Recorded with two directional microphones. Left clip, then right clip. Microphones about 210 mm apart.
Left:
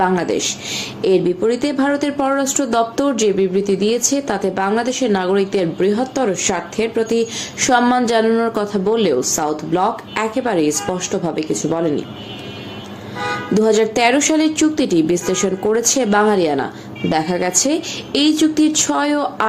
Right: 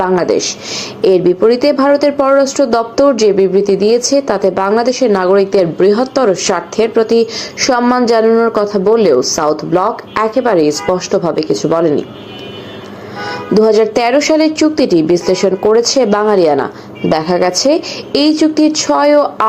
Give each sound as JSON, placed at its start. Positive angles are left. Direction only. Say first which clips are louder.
{"t": 0.0, "sound": "a woman's voice", "louder": "right 5 dB", "side_deg": 5}
{"t": 2.4, "sound": "speech", "louder": "right 8 dB", "side_deg": 25}
{"t": 2.7, "sound": "a woman's voice", "louder": "right 5 dB", "side_deg": 5}
{"t": 7.7, "sound": "a woman's voice", "louder": "right 4 dB", "side_deg": 5}
{"t": 13.6, "sound": "a woman's voice", "louder": "right 5 dB", "side_deg": 5}